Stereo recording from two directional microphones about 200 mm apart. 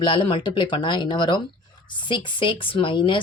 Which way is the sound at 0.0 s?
25° left (ahead or behind).